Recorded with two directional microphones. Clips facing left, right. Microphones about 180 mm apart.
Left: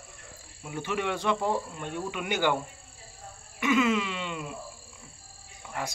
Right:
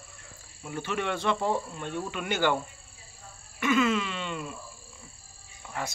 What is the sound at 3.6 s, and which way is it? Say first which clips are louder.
Speech: even; 15° left (ahead or behind).